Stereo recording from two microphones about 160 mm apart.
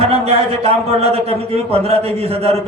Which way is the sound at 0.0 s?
40° right (ahead or behind).